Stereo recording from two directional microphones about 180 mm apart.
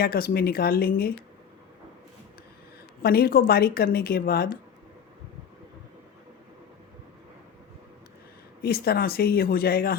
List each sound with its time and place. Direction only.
0.0 s a woman's voice: 55° left (ahead or behind)
3.0 s a woman's voice: 60° left (ahead or behind)
8.6 s a woman's voice: 60° left (ahead or behind)